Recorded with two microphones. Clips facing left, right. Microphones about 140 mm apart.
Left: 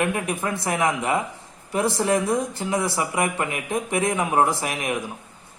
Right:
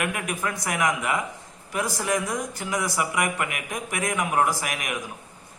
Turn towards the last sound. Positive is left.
turn(degrees=30)  # may be behind; listen again after turning